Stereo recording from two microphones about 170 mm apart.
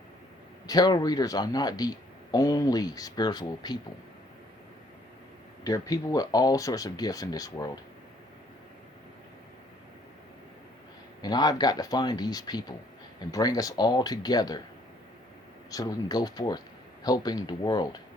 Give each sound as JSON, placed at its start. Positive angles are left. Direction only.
{"t": 0.7, "sound": "speech", "side_deg": 25}
{"t": 5.6, "sound": "speech", "side_deg": 20}
{"t": 11.2, "sound": "speech", "side_deg": 25}
{"t": 15.7, "sound": "speech", "side_deg": 20}